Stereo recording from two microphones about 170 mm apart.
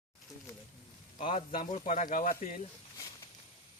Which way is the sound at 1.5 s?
50° left (ahead or behind).